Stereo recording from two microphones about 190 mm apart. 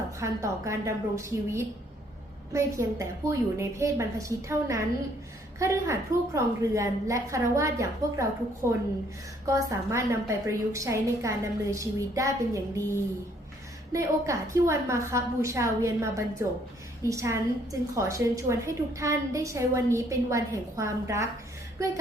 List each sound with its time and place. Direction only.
0.2 s a woman's voice: 15° right (ahead or behind)
13.9 s a woman's voice: 15° right (ahead or behind)